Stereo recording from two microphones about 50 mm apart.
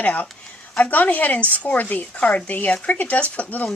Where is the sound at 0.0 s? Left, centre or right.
Left.